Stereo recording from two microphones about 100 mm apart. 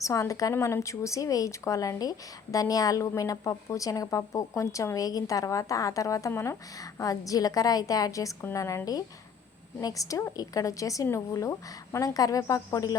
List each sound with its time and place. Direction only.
0.0 s speech: 35° left (ahead or behind)